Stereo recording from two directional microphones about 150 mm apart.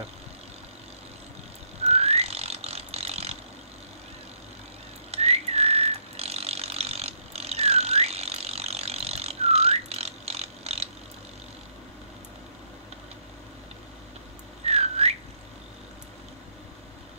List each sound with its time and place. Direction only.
1.8 s ratchet: 45° right (ahead or behind)
5.1 s ratchet: 45° right (ahead or behind)
14.6 s a sound: 45° right (ahead or behind)